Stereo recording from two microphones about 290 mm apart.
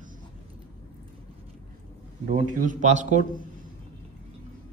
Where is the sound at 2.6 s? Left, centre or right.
Right.